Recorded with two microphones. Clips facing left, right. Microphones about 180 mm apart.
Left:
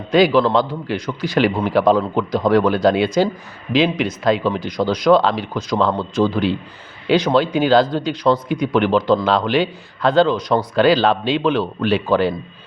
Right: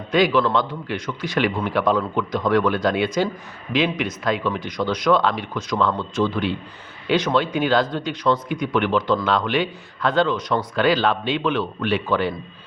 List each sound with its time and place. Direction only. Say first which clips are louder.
0.1 s a man's voice: left 4 dB; 35° left (ahead or behind)